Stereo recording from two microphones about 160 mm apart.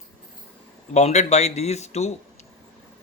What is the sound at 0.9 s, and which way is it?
Speech, 45° left (ahead or behind).